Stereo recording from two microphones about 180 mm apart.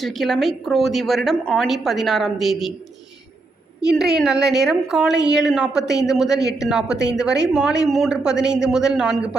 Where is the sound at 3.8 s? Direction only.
5° right (ahead or behind).